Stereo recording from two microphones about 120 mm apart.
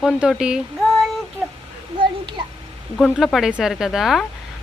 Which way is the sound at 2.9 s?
Centre (ahead or behind).